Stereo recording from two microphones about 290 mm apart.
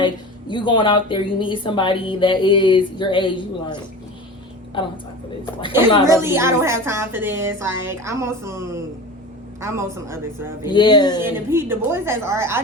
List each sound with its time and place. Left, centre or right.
0.0 s speech: centre
6.1 s a woman's voice: centre
10.7 s speech: centre
11.3 s a woman's voice: centre